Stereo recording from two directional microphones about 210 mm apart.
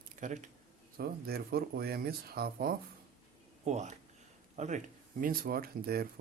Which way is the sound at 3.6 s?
35° right (ahead or behind).